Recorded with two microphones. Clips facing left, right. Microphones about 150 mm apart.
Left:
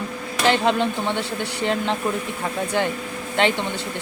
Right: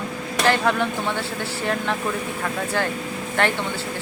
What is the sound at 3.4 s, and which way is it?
Speech, 20° left (ahead or behind).